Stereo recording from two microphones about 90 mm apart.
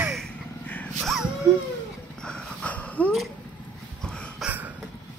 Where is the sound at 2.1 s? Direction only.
10° left (ahead or behind).